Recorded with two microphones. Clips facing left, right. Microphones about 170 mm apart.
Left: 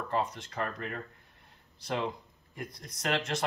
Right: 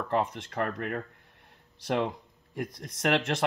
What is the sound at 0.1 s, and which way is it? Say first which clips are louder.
Speech: right 4 dB; 60° right (ahead or behind).